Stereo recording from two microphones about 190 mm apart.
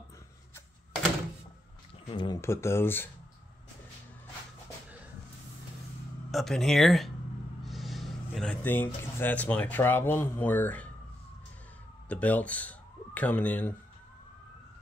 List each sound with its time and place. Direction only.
2.0 s speech: 25° left (ahead or behind)
2.4 s speech: 15° left (ahead or behind)
6.3 s speech: centre (ahead or behind)
12.1 s speech: 10° left (ahead or behind)